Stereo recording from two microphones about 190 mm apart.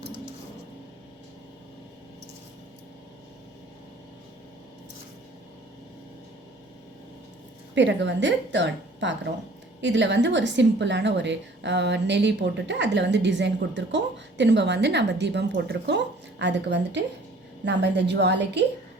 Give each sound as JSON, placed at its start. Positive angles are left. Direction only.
{"t": 7.8, "sound": "a woman's voice", "side_deg": -70}